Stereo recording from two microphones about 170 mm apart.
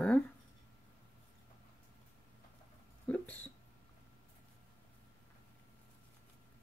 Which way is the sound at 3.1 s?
5° left (ahead or behind).